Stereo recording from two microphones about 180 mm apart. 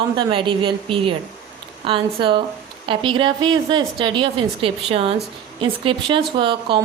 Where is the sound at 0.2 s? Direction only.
30° right (ahead or behind).